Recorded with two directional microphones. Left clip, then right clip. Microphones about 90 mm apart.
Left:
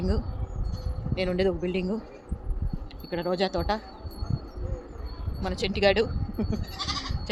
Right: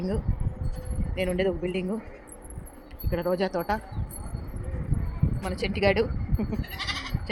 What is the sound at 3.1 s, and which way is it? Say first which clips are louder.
Speech: right 2 dB; 10° right (ahead or behind).